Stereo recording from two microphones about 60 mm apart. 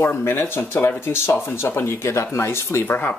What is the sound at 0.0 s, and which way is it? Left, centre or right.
Speech, left.